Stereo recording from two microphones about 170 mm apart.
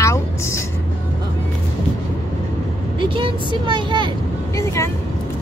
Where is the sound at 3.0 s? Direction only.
30° right (ahead or behind).